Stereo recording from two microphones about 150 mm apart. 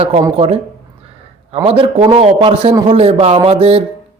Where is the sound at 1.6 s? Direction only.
40° right (ahead or behind).